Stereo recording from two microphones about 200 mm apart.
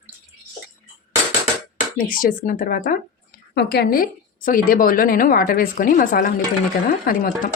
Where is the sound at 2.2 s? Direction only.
45° left (ahead or behind).